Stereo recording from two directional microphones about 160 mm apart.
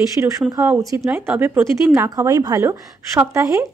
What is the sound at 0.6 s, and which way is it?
Speech, 15° right (ahead or behind).